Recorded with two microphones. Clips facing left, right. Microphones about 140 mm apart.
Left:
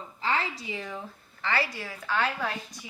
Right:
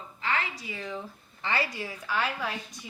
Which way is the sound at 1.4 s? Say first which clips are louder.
Left 1 dB; 20° right (ahead or behind).